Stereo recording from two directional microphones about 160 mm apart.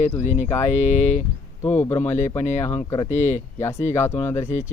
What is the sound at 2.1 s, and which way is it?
Speech, 45° left (ahead or behind).